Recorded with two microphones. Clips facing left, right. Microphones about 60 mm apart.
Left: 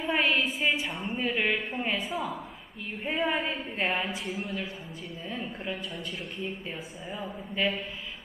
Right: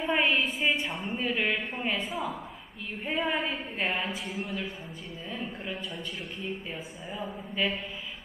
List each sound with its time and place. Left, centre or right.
0.0 s a woman's voice: centre
7.1 s a woman's voice: centre